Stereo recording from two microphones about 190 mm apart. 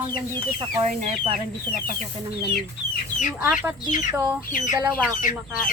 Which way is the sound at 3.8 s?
40° left (ahead or behind).